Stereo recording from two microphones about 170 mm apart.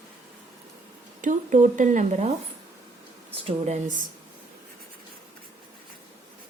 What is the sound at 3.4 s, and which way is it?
Speech, 40° right (ahead or behind).